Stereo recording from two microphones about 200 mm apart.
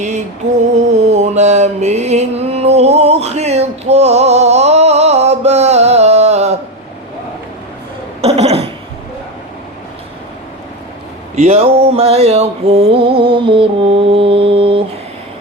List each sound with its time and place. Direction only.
0.4 s music: 35° right (ahead or behind)
0.9 s mantra: 35° right (ahead or behind)
8.2 s a sound: 30° right (ahead or behind)
11.3 s mantra: 30° right (ahead or behind)